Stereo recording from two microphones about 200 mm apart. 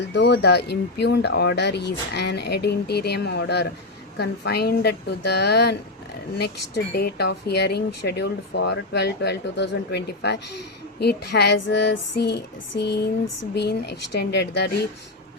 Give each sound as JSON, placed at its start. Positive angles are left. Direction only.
{"t": 0.0, "sound": "speech", "side_deg": 60}